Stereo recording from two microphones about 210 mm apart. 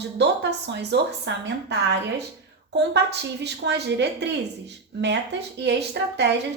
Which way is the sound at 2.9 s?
55° right (ahead or behind).